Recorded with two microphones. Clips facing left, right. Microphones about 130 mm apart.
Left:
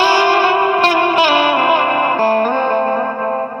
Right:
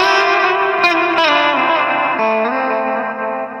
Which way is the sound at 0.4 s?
30° left (ahead or behind).